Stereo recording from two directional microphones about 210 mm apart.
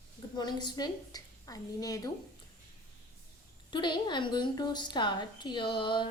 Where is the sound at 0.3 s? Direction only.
20° left (ahead or behind).